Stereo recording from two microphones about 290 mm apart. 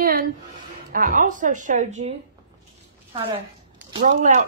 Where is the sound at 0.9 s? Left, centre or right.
Right.